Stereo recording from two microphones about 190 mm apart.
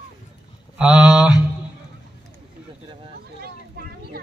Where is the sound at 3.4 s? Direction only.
55° right (ahead or behind).